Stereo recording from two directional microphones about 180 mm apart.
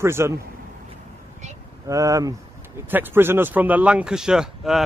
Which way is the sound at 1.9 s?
20° right (ahead or behind).